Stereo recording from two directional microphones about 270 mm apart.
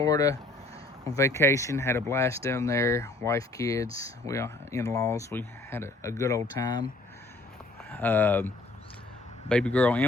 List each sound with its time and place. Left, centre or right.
0.0 s speech: centre
7.9 s speech: centre